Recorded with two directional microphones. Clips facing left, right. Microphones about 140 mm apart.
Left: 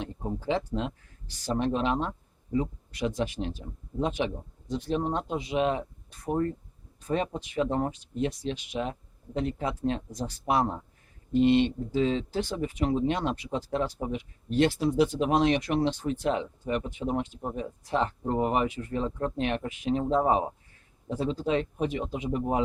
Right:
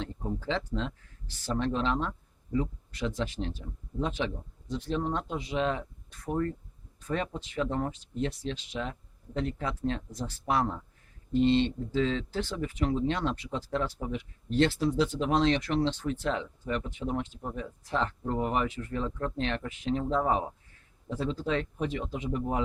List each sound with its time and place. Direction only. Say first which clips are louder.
0.0 s speech: left 1 dB; 20° left (ahead or behind)